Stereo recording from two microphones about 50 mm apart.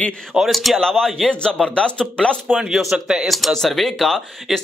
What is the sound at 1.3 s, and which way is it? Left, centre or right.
Speech, left.